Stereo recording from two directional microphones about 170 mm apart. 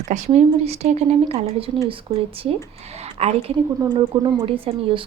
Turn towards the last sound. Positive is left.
turn(degrees=-35)  # may be behind; listen again after turning